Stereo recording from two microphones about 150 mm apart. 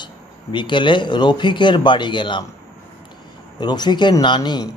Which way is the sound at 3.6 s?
30° left (ahead or behind).